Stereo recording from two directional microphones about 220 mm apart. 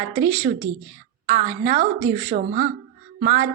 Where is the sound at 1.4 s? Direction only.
40° right (ahead or behind).